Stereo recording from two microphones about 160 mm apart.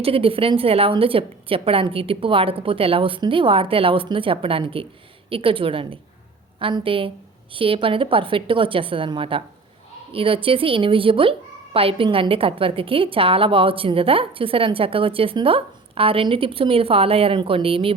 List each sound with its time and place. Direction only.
0.0 s a woman's voice: 35° right (ahead or behind)